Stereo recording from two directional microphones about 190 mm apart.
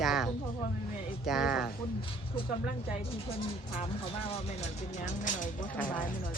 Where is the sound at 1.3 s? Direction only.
5° right (ahead or behind).